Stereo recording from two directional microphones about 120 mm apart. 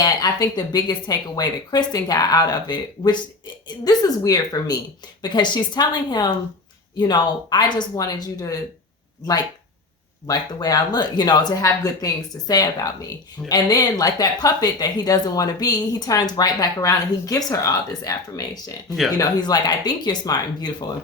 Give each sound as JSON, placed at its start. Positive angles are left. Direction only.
{"t": 0.0, "sound": "speech", "side_deg": 35}
{"t": 10.2, "sound": "speech", "side_deg": 30}